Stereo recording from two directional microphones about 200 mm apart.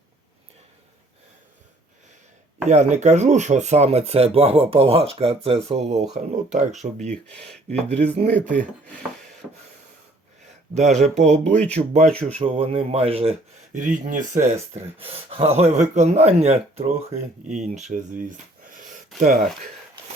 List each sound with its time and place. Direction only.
2.6 s speech: 35° right (ahead or behind)
7.1 s speech: 5° left (ahead or behind)
7.7 s speech: 30° right (ahead or behind)
8.3 s speech: 5° left (ahead or behind)
10.8 s speech: 35° right (ahead or behind)
13.7 s speech: 40° right (ahead or behind)